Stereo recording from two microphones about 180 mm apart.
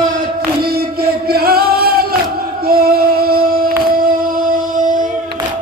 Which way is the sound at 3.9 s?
50° right (ahead or behind).